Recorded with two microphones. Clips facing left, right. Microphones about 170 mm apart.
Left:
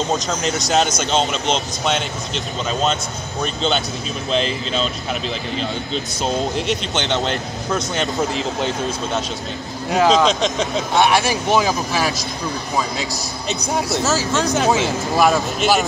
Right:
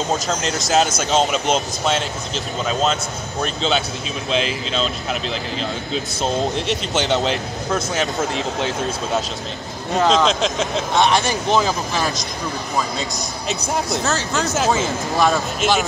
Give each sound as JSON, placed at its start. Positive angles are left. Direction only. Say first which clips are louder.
{"t": 0.1, "sound": "speech", "louder": "left 1 dB", "side_deg": 0}
{"t": 6.2, "sound": "speech", "louder": "even", "side_deg": 0}
{"t": 13.5, "sound": "speech", "louder": "left 1 dB", "side_deg": 5}